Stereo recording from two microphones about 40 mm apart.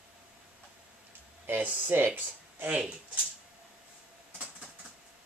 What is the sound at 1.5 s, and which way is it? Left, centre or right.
Speech, right.